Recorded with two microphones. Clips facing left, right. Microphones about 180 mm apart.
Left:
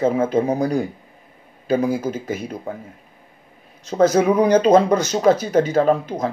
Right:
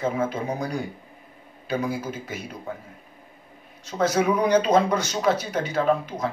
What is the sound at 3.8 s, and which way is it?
Speech, 45° left (ahead or behind).